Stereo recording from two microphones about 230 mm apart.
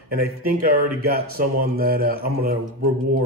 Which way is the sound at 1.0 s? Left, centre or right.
Right.